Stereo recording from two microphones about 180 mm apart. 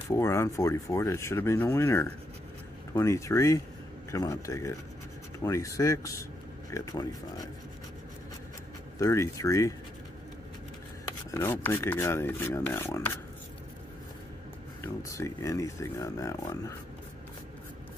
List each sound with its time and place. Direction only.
0.1 s speech: 15° left (ahead or behind)
9.0 s speech: 15° left (ahead or behind)
11.3 s speech: 15° left (ahead or behind)
14.8 s speech: 15° left (ahead or behind)